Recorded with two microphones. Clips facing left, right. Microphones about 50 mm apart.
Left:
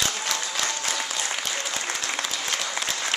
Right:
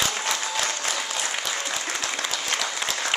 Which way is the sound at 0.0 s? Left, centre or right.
Centre.